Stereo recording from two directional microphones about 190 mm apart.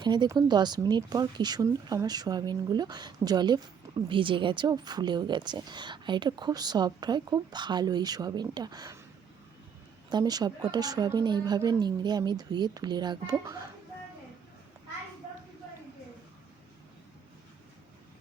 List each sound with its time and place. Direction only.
0.0 s speech: 25° right (ahead or behind)
10.1 s speech: 20° right (ahead or behind)